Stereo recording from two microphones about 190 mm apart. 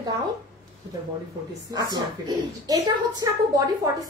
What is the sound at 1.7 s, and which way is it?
A woman's voice, 20° right (ahead or behind).